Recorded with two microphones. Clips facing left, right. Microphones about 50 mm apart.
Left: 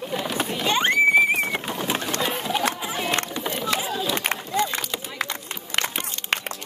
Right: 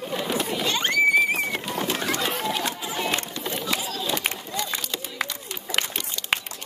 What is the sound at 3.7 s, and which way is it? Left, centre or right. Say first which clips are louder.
Run: left 3 dB; left.